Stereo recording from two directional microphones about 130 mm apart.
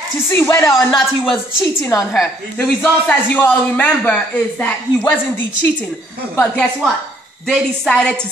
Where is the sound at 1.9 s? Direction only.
25° left (ahead or behind).